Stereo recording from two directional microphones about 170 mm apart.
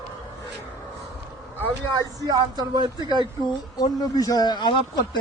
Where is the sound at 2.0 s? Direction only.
20° right (ahead or behind).